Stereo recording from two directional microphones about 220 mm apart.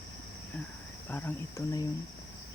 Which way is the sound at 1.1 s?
10° left (ahead or behind).